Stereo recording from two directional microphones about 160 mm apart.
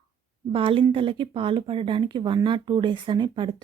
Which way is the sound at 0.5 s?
35° right (ahead or behind).